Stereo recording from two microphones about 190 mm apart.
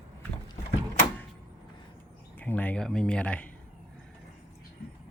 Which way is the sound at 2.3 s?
10° left (ahead or behind).